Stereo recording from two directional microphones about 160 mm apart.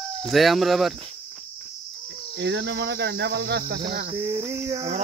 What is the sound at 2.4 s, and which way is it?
Cricket, 90° right.